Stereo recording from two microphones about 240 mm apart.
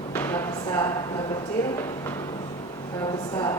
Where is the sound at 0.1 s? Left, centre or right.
Centre.